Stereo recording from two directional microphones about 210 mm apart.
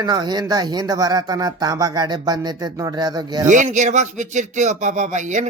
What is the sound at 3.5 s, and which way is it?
Speech, 35° right (ahead or behind).